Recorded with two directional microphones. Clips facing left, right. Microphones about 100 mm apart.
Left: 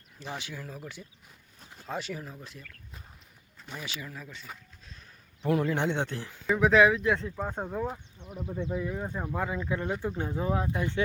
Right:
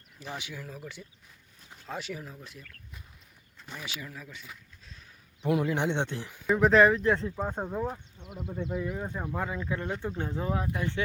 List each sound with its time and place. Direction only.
0.3 s speech: 5° right (ahead or behind)
5.4 s speech: 15° right (ahead or behind)
6.5 s speech: centre (ahead or behind)
8.2 s speech: 15° right (ahead or behind)
9.0 s speech: centre (ahead or behind)
9.5 s speech: 15° left (ahead or behind)